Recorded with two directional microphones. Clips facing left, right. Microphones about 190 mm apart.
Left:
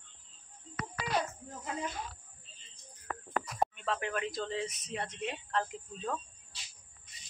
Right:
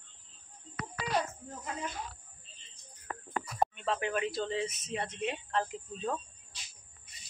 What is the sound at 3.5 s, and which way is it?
Speech, centre (ahead or behind).